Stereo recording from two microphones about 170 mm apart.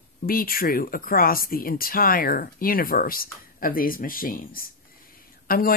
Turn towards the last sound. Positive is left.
turn(degrees=60)  # may be behind; listen again after turning